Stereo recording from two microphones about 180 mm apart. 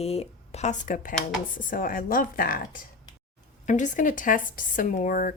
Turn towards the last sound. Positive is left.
turn(degrees=50)  # may be behind; listen again after turning